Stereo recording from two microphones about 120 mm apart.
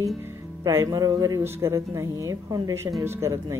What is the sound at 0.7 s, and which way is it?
Speech, 25° right (ahead or behind).